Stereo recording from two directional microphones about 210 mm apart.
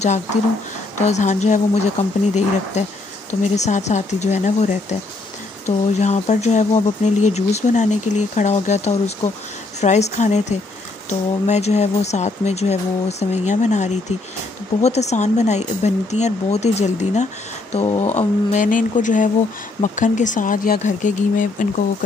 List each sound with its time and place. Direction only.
0.0 s speech: 35° left (ahead or behind)